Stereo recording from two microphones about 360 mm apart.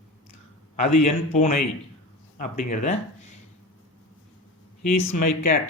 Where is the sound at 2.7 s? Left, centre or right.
Centre.